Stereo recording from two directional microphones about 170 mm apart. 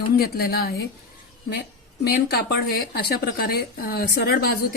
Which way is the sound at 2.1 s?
65° left (ahead or behind).